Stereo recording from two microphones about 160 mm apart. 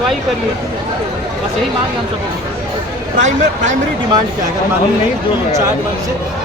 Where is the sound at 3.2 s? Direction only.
50° right (ahead or behind).